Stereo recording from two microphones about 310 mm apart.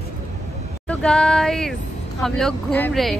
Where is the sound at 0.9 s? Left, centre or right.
Centre.